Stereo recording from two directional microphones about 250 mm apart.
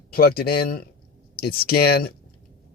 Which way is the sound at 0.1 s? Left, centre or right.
Left.